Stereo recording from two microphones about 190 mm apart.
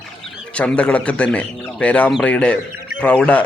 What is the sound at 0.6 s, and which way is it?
A man's voice, 5° left (ahead or behind).